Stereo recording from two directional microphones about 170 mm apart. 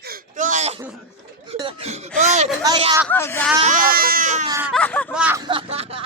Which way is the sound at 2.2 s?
45° right (ahead or behind).